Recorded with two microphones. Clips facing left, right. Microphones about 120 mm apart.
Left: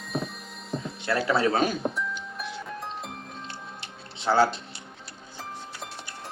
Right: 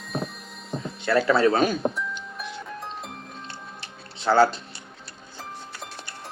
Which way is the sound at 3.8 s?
15° left (ahead or behind).